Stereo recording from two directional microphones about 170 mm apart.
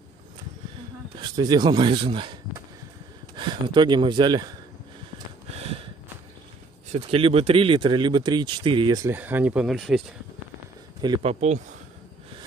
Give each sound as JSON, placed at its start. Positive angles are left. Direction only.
{"t": 1.1, "sound": "speech", "side_deg": -25}
{"t": 5.5, "sound": "a sound", "side_deg": -35}
{"t": 6.9, "sound": "speech", "side_deg": -35}
{"t": 9.1, "sound": "speech", "side_deg": -10}
{"t": 11.2, "sound": "speech", "side_deg": -40}